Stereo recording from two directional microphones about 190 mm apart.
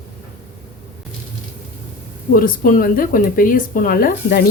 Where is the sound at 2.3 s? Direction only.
50° left (ahead or behind).